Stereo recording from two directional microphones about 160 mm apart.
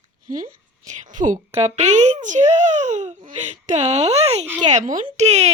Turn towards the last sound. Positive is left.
turn(degrees=-45)  # may be behind; listen again after turning